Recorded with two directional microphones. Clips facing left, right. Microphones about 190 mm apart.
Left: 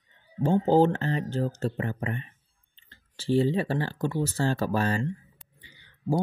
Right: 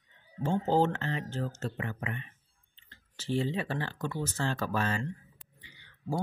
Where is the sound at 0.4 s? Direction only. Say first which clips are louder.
Left 6 dB; 35° left (ahead or behind).